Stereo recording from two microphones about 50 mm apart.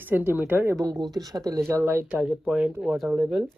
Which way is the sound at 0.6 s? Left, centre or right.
Right.